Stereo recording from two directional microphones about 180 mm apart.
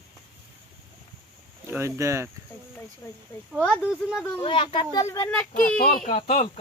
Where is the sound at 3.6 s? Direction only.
5° right (ahead or behind).